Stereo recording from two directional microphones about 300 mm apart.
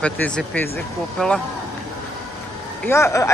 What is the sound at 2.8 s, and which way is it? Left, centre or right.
Speech, centre.